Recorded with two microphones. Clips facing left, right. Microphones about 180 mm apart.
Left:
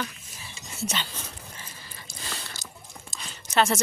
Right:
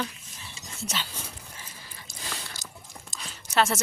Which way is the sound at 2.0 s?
10° right (ahead or behind).